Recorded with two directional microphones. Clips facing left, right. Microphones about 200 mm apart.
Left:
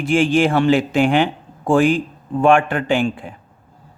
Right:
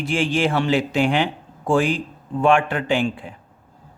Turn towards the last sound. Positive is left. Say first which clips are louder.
# left 3 dB
turn(degrees=50)  # may be behind; listen again after turning